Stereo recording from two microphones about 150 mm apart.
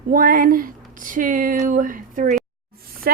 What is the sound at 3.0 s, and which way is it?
Speech, 90° right.